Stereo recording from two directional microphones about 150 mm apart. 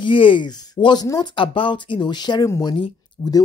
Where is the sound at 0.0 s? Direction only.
35° left (ahead or behind).